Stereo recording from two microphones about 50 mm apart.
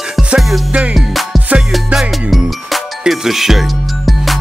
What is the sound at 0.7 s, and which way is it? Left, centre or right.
Music, right.